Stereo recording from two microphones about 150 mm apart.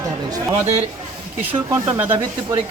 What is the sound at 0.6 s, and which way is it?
Speech, 45° right (ahead or behind).